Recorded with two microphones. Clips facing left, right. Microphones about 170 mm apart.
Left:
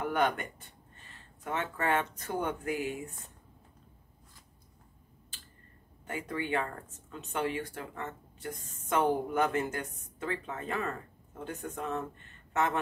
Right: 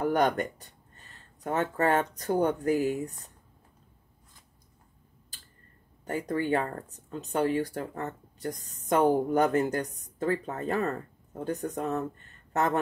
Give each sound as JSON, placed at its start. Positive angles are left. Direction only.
{"t": 0.0, "sound": "speech", "side_deg": -40}
{"t": 6.0, "sound": "speech", "side_deg": -40}